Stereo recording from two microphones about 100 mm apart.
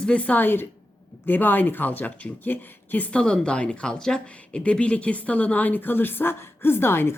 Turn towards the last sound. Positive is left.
turn(degrees=25)  # may be behind; listen again after turning